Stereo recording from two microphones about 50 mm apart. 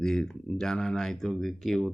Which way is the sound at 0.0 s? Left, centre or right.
Centre.